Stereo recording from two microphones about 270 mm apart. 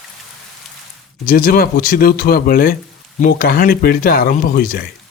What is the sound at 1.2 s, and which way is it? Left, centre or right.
Speech, left.